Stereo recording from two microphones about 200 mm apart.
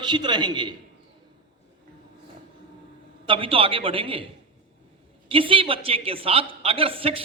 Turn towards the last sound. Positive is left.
turn(degrees=-30)  # may be behind; listen again after turning